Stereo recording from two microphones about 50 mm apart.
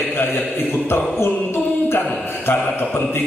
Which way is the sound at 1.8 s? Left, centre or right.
Left.